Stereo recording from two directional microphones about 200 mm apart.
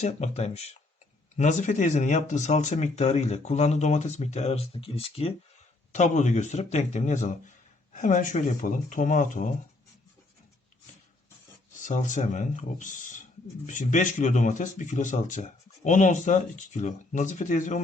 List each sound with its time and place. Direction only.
0.0 s speech: 35° left (ahead or behind)
11.8 s speech: 40° left (ahead or behind)